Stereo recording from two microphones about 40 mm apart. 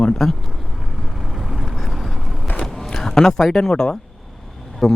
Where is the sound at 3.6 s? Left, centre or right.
Centre.